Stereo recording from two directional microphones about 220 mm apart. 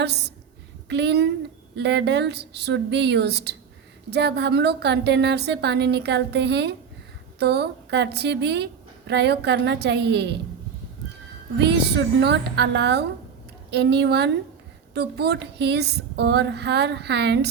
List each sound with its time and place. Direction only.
0.0 s a woman's voice: 50° right (ahead or behind)
11.5 s a woman's voice: 50° right (ahead or behind)